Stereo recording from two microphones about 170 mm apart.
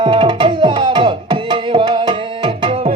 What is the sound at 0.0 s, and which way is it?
Music, 30° right (ahead or behind).